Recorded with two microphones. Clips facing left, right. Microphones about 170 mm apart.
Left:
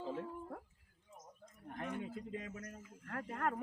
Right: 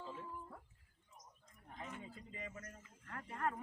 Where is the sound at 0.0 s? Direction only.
65° left (ahead or behind).